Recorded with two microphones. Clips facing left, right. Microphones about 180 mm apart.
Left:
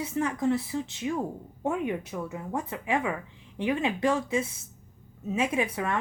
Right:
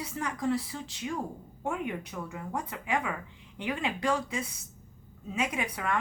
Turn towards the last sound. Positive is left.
turn(degrees=25)  # may be behind; listen again after turning